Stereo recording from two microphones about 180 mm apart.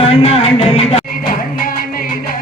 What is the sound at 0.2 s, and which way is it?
Music, 35° left (ahead or behind).